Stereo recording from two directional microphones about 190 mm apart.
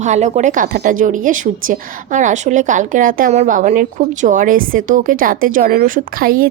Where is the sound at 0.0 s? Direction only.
40° right (ahead or behind).